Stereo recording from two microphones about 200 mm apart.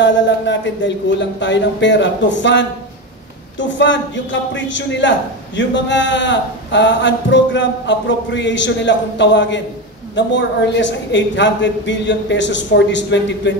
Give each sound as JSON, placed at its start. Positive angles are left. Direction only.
{"t": 0.0, "sound": "speech", "side_deg": 65}